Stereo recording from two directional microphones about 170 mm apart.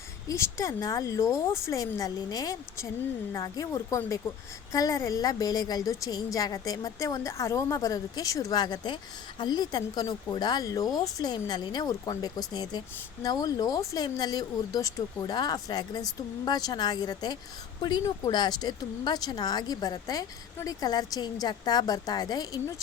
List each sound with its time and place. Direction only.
0.3 s speech: 15° left (ahead or behind)